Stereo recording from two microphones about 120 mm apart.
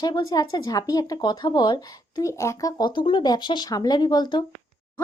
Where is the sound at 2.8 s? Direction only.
40° left (ahead or behind).